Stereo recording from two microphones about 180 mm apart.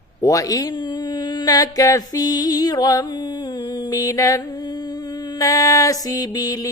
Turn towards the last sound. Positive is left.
turn(degrees=20)  # may be behind; listen again after turning